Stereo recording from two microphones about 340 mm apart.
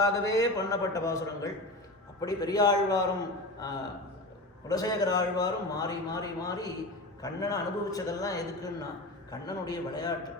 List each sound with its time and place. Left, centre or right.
0.0 s a man's voice: centre